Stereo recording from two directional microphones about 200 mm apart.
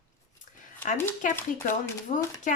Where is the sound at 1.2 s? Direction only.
40° left (ahead or behind).